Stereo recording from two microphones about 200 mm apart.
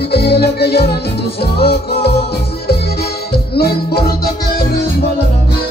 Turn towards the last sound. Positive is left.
turn(degrees=50)  # may be behind; listen again after turning